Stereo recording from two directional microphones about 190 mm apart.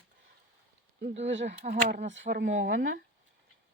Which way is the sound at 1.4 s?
40° right (ahead or behind).